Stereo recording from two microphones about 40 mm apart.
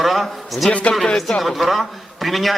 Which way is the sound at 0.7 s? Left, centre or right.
Left.